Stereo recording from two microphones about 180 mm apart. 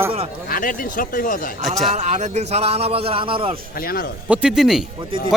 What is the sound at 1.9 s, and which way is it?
A man's voice, 40° right (ahead or behind).